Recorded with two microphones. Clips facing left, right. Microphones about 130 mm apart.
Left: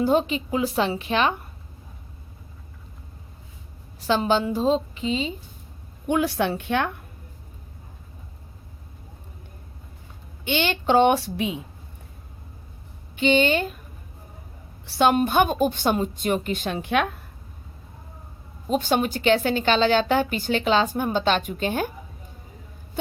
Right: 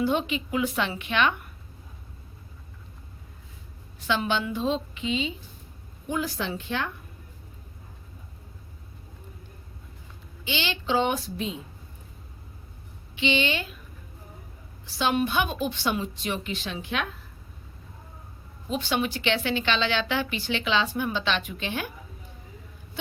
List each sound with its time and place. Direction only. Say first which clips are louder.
0.0 s a woman's voice: left 5 dB; 40° left (ahead or behind)
4.0 s a woman's voice: left 5 dB; 35° left (ahead or behind)
6.1 s a woman's voice: left 7 dB; 65° left (ahead or behind)
10.4 s a woman's voice: left 7 dB; 55° left (ahead or behind)
13.1 s a woman's voice: left 6 dB; 45° left (ahead or behind)
14.8 s a woman's voice: left 6 dB; 55° left (ahead or behind)
18.7 s a woman's voice: left 5 dB; 45° left (ahead or behind)